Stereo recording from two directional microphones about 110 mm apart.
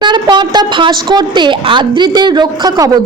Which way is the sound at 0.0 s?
45° right (ahead or behind).